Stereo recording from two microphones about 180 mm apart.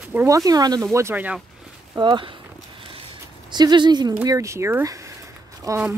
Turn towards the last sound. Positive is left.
turn(degrees=-15)  # may be behind; listen again after turning